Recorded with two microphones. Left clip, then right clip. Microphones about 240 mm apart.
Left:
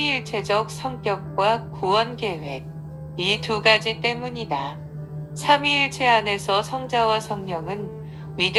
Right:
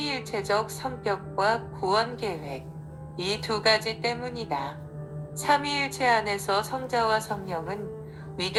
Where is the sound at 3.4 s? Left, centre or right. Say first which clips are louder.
Left 4 dB; centre.